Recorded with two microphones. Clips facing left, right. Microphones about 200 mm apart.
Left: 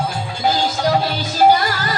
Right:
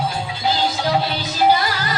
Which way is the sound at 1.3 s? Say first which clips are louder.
Left 3 dB; 45° left (ahead or behind).